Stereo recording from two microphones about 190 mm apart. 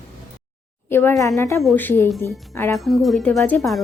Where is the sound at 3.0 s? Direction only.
Centre (ahead or behind).